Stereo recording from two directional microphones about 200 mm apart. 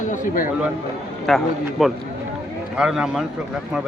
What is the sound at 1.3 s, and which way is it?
Speech, centre (ahead or behind).